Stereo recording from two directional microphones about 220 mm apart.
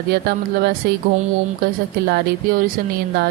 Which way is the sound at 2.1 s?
45° right (ahead or behind).